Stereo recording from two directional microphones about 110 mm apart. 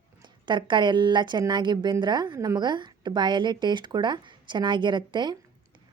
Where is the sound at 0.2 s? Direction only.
45° right (ahead or behind).